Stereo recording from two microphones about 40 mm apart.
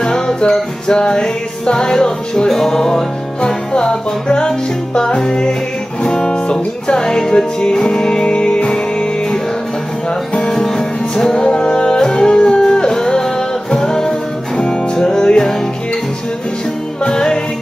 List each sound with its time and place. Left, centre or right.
0.0 s music: centre
10.5 s music: centre
17.1 s music: centre